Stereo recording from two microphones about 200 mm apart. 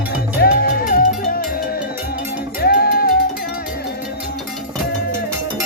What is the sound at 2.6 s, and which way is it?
Music, 50° left (ahead or behind).